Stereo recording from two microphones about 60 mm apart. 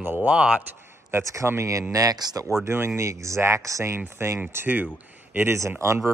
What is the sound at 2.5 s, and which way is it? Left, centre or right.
Speech, right.